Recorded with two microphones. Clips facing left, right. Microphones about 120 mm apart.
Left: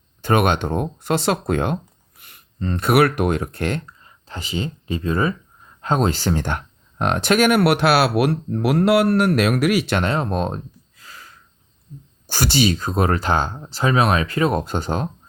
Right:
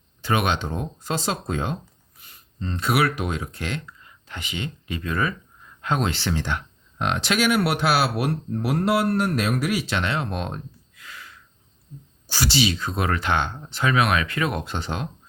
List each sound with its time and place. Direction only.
0.2 s speech: 50° left (ahead or behind)
4.0 s speech: 35° left (ahead or behind); by 10.0 s 70° left (ahead or behind)
10.0 s a sound: 40° left (ahead or behind)
12.3 s speech: 50° left (ahead or behind)